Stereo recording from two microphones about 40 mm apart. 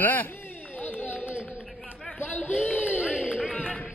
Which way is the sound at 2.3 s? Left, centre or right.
Left.